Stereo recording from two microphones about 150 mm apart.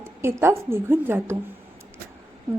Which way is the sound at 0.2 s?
15° right (ahead or behind).